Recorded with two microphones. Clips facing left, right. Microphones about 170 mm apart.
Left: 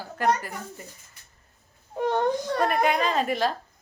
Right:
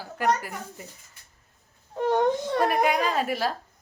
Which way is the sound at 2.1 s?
20° right (ahead or behind).